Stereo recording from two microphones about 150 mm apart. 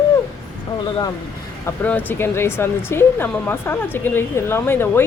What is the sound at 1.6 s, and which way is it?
Speech, 10° left (ahead or behind).